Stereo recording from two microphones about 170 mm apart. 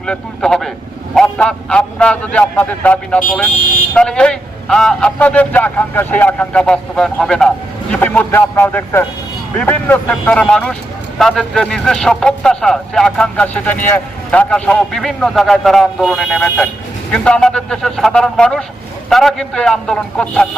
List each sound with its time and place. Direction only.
0.0 s a man's voice: 5° left (ahead or behind)